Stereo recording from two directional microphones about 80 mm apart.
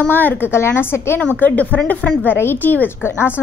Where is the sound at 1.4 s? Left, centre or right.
Centre.